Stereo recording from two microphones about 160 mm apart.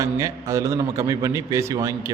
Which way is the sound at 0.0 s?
20° right (ahead or behind).